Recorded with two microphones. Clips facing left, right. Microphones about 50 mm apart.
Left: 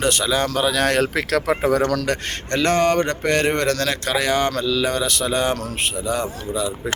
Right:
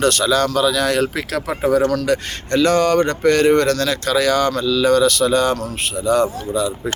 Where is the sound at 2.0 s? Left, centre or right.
Left; by 6.2 s centre.